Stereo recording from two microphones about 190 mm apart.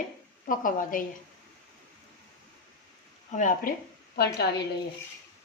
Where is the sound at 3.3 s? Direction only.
45° left (ahead or behind).